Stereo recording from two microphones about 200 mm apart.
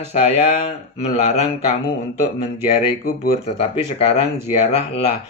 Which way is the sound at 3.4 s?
30° left (ahead or behind).